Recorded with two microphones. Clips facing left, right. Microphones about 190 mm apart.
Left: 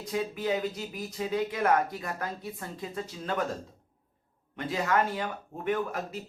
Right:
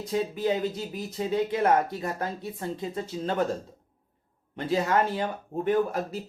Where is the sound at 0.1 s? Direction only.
30° right (ahead or behind).